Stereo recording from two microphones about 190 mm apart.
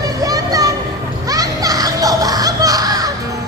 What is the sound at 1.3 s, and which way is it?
Music, 20° right (ahead or behind).